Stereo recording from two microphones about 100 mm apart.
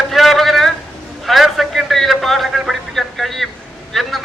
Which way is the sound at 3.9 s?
Centre (ahead or behind).